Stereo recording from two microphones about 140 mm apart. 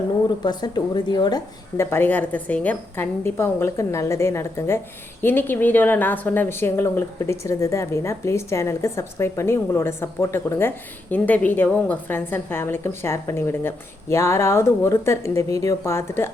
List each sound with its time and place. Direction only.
0.3 s speech: 30° left (ahead or behind)
1.7 s a woman's voice: 20° left (ahead or behind)